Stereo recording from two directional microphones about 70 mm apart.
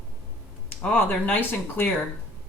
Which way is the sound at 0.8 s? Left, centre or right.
Left.